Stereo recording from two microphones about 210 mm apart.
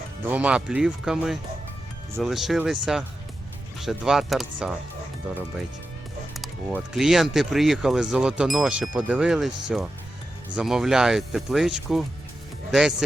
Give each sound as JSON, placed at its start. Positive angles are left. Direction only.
{"t": 0.3, "sound": "speech", "side_deg": -5}
{"t": 6.7, "sound": "speech", "side_deg": 0}